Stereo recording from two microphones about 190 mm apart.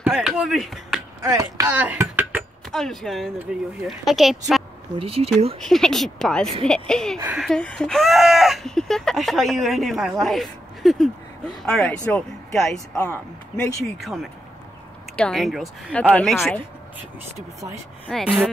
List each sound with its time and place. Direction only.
0.0 s speech: 5° right (ahead or behind)
1.2 s speech: 15° right (ahead or behind)
2.7 s speech: centre (ahead or behind)
4.9 s speech: 30° right (ahead or behind)
5.6 s speech: 5° left (ahead or behind)
12.0 s speech: 15° left (ahead or behind)
13.9 s speech: centre (ahead or behind)
18.2 s speech: 5° right (ahead or behind)